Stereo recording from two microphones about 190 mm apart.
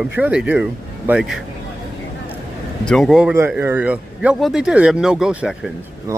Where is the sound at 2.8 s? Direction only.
5° left (ahead or behind).